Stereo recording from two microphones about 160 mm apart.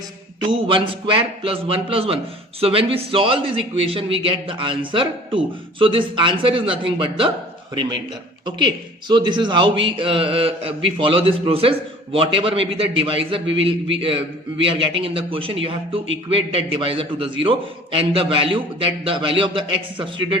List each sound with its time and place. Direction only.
0.7 s a man's voice: 30° right (ahead or behind)